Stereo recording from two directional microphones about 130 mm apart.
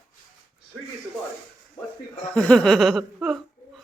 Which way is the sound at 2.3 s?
5° left (ahead or behind).